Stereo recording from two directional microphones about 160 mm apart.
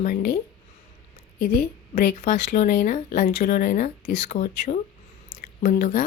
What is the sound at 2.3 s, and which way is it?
Speech, 65° left (ahead or behind).